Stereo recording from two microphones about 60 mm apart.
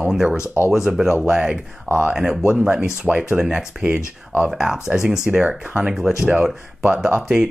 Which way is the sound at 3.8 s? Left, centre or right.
Right.